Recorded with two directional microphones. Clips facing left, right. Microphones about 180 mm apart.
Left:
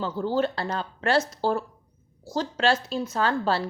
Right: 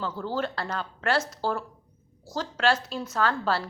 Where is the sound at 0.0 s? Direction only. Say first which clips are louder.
Left 5 dB; 20° left (ahead or behind).